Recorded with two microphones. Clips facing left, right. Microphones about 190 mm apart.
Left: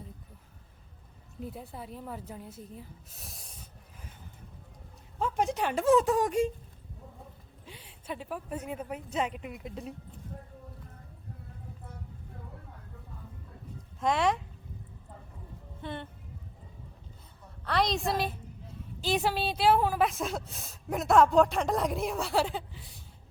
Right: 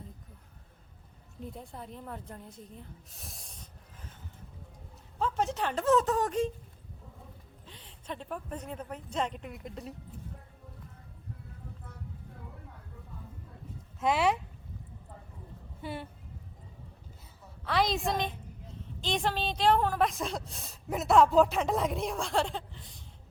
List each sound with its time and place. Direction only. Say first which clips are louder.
1.4 s speech: left 2 dB; 5° left (ahead or behind)
5.2 s speech: left 1 dB; 15° left (ahead or behind)
7.6 s a woman's voice: left 7 dB; 10° left (ahead or behind)
14.0 s a woman's voice: even; 5° right (ahead or behind)
15.8 s speech: even; 5° right (ahead or behind)
17.7 s a woman's voice: even; centre (ahead or behind)